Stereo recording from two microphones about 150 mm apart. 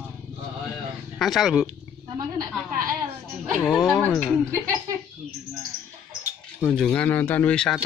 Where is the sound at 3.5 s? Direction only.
Centre (ahead or behind).